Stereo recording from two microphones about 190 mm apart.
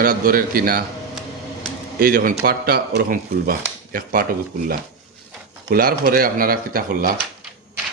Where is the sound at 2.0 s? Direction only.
50° right (ahead or behind).